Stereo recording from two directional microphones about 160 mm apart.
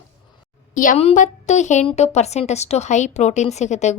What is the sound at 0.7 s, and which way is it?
A woman's voice, 55° left (ahead or behind).